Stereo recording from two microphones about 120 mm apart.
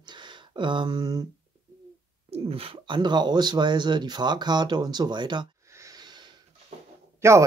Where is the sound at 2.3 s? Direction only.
55° right (ahead or behind).